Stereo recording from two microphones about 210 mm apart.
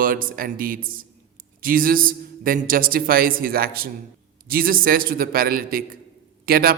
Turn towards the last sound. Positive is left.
turn(degrees=-45)  # may be behind; listen again after turning